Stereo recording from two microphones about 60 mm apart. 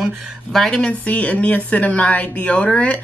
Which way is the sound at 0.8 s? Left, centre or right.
Left.